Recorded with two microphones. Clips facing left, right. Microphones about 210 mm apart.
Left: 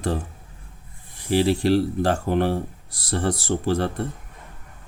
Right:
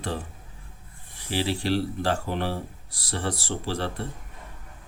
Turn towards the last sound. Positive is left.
turn(degrees=50)  # may be behind; listen again after turning